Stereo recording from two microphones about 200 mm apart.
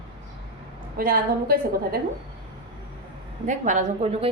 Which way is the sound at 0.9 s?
45° right (ahead or behind).